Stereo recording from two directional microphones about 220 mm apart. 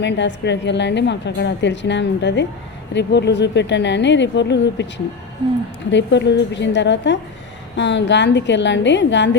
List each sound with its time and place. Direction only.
0.0 s a woman's voice: 55° left (ahead or behind)
5.9 s a woman's voice: 55° left (ahead or behind)